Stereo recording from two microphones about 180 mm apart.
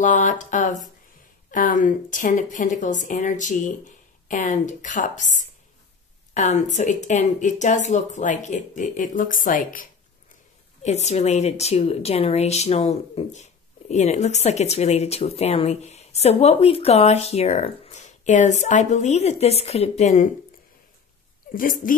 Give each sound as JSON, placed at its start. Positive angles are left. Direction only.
{"t": 0.0, "sound": "a woman's voice", "side_deg": 45}
{"t": 10.8, "sound": "speech", "side_deg": 40}
{"t": 21.5, "sound": "a woman's voice", "side_deg": 50}